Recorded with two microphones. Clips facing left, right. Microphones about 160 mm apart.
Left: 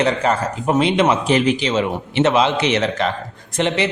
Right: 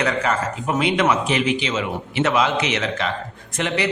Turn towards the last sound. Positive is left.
turn(degrees=25)  # may be behind; listen again after turning